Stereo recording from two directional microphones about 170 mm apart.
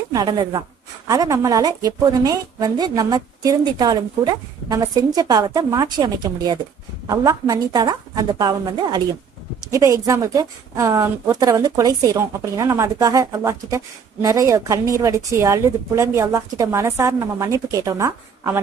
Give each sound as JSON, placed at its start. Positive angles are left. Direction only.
{"t": 0.1, "sound": "a woman's voice", "side_deg": -20}